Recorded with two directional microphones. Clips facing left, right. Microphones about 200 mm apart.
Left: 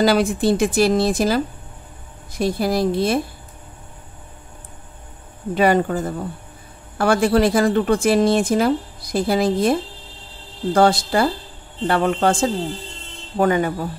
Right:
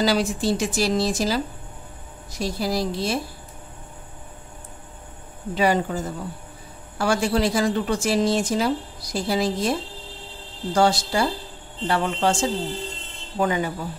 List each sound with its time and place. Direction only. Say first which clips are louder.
0.0 s speech: left 5 dB; 55° left (ahead or behind)
5.5 s speech: left 4 dB; 55° left (ahead or behind)